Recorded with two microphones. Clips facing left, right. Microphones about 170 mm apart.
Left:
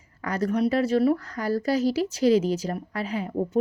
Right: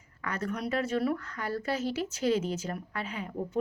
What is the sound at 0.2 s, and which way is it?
A woman's voice, 35° left (ahead or behind).